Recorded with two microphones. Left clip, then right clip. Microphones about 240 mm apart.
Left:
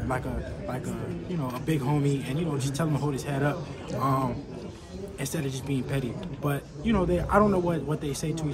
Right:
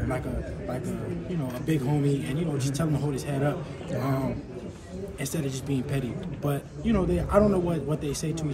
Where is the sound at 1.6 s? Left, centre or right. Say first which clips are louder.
Right 1 dB; centre.